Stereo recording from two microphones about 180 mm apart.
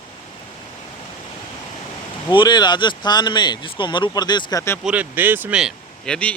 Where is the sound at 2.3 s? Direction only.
25° left (ahead or behind).